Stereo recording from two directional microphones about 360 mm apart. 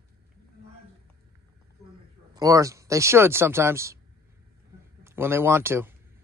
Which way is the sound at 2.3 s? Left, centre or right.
Centre.